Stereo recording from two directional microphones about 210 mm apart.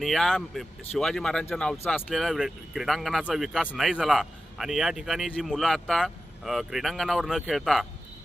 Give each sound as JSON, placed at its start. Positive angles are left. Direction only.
{"t": 0.0, "sound": "a man's voice", "side_deg": 0}